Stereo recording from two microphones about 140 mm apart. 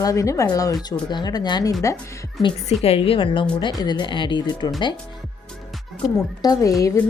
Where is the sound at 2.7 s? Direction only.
45° left (ahead or behind).